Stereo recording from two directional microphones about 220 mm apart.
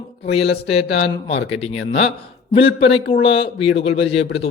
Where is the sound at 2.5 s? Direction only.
25° left (ahead or behind).